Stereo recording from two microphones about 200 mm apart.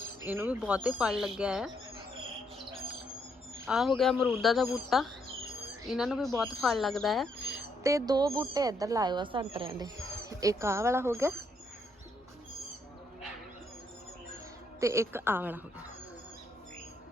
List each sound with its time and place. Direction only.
0.2 s speech: 10° right (ahead or behind)
3.7 s speech: centre (ahead or behind)
7.9 s speech: 15° right (ahead or behind)
14.8 s speech: 15° right (ahead or behind)